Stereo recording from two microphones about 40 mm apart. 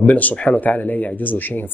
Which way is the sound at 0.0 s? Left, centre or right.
Left.